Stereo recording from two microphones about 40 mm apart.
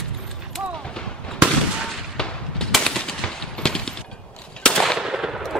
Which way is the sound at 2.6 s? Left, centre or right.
Centre.